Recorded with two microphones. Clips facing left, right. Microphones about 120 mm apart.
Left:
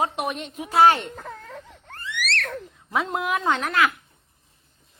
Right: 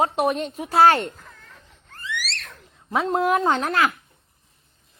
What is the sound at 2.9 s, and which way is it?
Speech, 35° right (ahead or behind).